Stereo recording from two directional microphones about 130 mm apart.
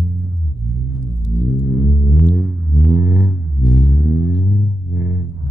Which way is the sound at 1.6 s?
35° right (ahead or behind).